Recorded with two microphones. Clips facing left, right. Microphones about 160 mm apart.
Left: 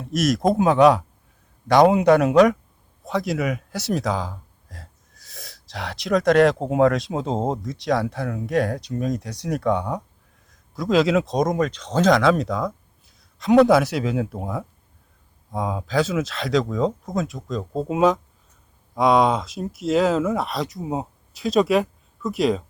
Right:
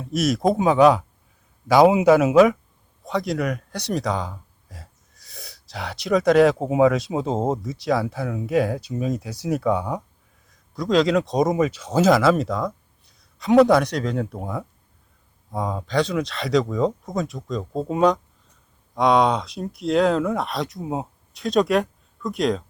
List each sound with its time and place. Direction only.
0.0 s speech: centre (ahead or behind)